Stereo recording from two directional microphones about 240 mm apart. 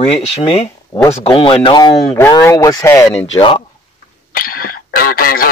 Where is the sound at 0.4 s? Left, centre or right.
Left.